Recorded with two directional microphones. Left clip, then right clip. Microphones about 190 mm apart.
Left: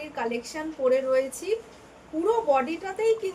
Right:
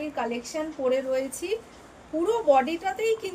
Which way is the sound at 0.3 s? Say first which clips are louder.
Even; 20° left (ahead or behind).